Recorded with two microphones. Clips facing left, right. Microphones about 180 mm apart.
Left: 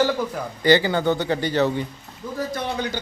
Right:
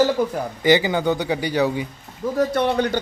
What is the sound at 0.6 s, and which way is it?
A man's voice, 15° right (ahead or behind).